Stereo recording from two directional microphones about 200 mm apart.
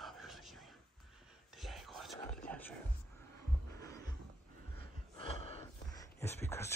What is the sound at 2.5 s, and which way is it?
Music, 10° left (ahead or behind).